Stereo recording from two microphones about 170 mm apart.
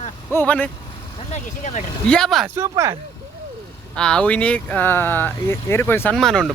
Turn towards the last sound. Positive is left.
turn(degrees=0)  # may be behind; listen again after turning